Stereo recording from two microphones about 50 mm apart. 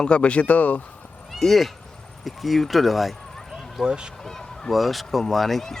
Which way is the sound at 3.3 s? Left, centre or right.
Centre.